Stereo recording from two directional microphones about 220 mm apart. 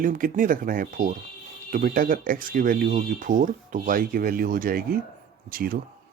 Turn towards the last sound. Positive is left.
turn(degrees=-40)  # may be behind; listen again after turning